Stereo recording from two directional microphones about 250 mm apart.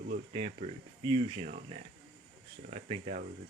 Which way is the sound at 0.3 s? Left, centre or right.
Right.